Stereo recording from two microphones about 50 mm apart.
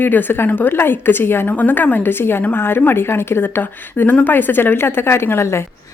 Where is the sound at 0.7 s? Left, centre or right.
Left.